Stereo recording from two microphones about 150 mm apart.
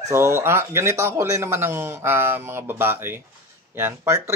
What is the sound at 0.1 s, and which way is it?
A man's voice, 15° right (ahead or behind).